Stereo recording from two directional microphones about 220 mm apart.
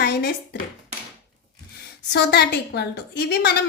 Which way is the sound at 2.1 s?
50° left (ahead or behind).